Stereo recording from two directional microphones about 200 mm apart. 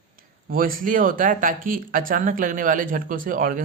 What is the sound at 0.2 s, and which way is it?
Speech, 45° right (ahead or behind).